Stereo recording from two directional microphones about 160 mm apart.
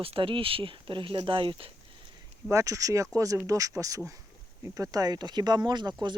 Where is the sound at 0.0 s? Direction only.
35° right (ahead or behind).